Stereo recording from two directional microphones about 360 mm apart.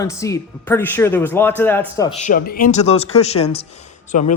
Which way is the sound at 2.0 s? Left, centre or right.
Centre.